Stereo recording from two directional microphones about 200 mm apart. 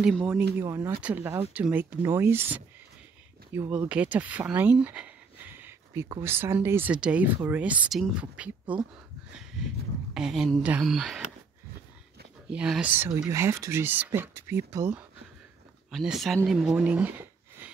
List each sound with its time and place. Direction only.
0.0 s speech: centre (ahead or behind)
0.6 s speech: 10° right (ahead or behind)
9.3 s a sound: centre (ahead or behind)
10.1 s speech: centre (ahead or behind)
12.4 s speech: 5° right (ahead or behind)